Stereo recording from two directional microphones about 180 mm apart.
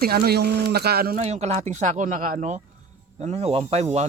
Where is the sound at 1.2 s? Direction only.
35° right (ahead or behind).